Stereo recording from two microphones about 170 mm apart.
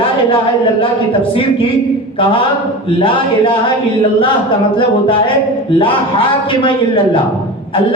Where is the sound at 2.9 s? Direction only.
30° left (ahead or behind).